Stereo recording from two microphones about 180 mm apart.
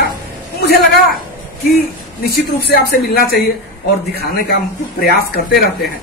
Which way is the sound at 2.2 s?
65° left (ahead or behind).